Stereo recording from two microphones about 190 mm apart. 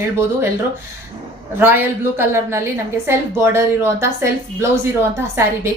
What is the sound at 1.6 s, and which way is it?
A woman's voice, 10° right (ahead or behind).